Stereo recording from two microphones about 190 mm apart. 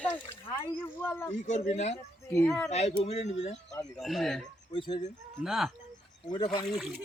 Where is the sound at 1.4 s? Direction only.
35° left (ahead or behind).